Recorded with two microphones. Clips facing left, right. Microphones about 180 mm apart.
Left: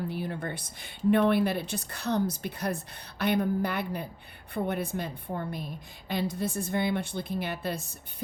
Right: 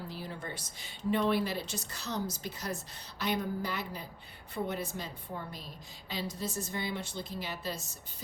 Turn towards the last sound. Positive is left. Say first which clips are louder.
# left 6 dB
turn(degrees=60)  # may be behind; listen again after turning